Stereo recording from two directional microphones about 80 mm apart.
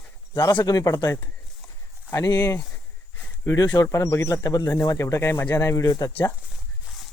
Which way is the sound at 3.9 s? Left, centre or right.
Left.